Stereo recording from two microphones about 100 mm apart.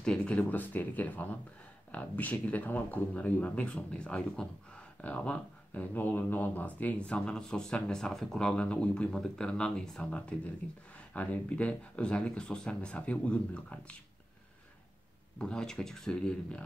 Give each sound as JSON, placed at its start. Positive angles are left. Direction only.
{"t": 0.0, "sound": "speech", "side_deg": 10}
{"t": 15.3, "sound": "speech", "side_deg": 10}